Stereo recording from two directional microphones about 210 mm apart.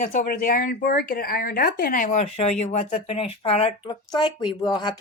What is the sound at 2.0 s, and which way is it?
Speech, 30° left (ahead or behind).